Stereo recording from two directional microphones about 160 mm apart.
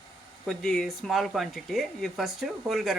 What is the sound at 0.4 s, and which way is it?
Speech, 5° left (ahead or behind).